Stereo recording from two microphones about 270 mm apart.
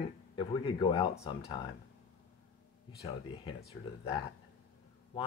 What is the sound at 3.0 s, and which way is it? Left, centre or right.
Speech, left.